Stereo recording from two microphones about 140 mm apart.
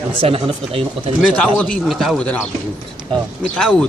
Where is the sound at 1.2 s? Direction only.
5° left (ahead or behind).